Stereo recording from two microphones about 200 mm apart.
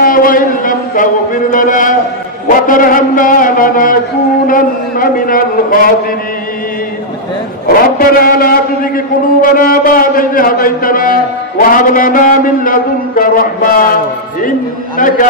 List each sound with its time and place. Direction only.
0.0 s a man's voice: 45° left (ahead or behind)
7.6 s a man's voice: 45° left (ahead or behind)
15.0 s a man's voice: 40° left (ahead or behind)